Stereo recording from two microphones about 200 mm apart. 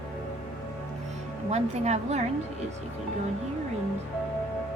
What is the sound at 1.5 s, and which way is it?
Speech, 35° right (ahead or behind).